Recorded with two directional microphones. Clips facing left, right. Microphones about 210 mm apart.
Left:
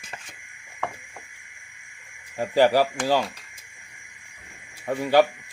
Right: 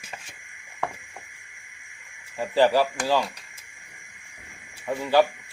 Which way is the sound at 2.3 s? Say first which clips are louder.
Left 1 dB; 15° left (ahead or behind).